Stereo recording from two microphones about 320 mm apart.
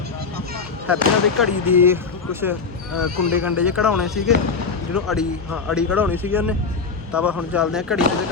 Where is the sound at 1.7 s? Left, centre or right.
Centre.